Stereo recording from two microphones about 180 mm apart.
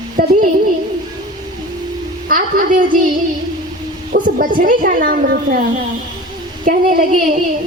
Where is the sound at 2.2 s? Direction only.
50° right (ahead or behind).